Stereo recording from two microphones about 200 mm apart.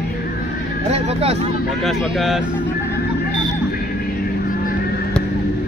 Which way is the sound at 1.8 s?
Centre (ahead or behind).